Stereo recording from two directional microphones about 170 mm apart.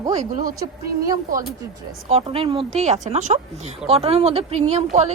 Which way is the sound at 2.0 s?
35° right (ahead or behind).